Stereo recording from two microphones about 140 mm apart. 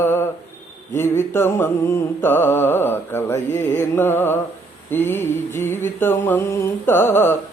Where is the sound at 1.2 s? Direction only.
15° left (ahead or behind).